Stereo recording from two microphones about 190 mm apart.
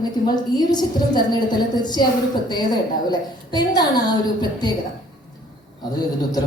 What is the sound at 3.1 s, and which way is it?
A woman's voice, 20° left (ahead or behind).